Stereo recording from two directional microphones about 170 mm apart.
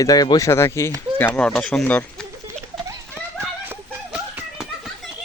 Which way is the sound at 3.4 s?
10° right (ahead or behind).